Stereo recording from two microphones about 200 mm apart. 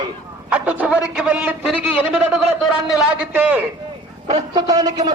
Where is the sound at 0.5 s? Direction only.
10° right (ahead or behind).